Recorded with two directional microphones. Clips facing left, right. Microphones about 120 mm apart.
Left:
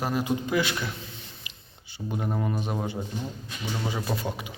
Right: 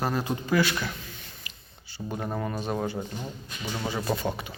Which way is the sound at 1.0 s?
25° left (ahead or behind).